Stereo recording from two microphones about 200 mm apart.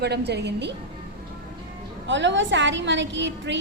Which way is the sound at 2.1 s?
65° right (ahead or behind).